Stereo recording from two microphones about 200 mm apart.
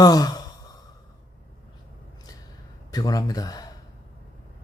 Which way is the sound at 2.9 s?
20° left (ahead or behind).